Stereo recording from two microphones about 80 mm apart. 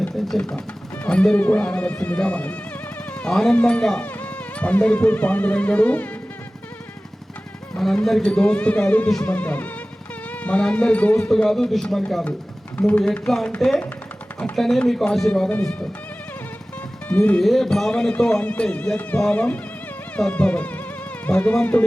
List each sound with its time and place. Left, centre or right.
0.1 s speech: centre
7.8 s speech: centre
9.2 s music: left
10.4 s speech: centre
11.3 s a man's voice: centre
12.9 s a man's voice: centre
15.3 s speech: centre
17.1 s speech: centre
17.4 s speech: centre